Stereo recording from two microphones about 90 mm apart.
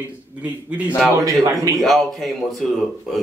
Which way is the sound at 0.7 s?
15° right (ahead or behind).